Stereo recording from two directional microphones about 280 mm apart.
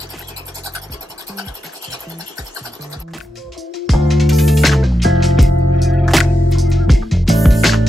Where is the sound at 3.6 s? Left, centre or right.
Centre.